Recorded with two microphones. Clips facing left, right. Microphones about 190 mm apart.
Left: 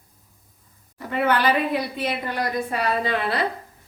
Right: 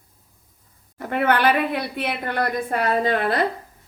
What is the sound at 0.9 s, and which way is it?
A woman's voice, 55° right (ahead or behind).